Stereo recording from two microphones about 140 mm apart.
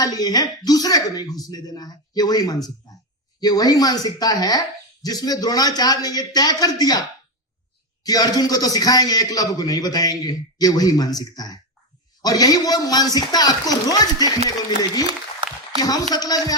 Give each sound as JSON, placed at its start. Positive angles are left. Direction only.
{"t": 0.0, "sound": "a man's voice", "side_deg": 25}
{"t": 8.0, "sound": "a man's voice", "side_deg": 25}
{"t": 15.8, "sound": "a man's voice", "side_deg": 25}